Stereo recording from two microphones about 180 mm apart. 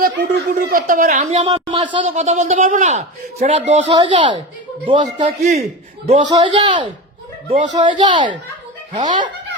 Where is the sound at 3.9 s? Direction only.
25° right (ahead or behind).